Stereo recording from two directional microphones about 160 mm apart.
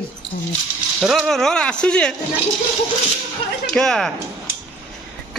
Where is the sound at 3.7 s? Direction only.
5° left (ahead or behind).